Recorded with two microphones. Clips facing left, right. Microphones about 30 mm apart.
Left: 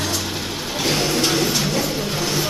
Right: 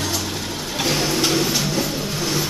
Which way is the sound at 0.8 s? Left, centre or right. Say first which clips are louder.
Even; centre.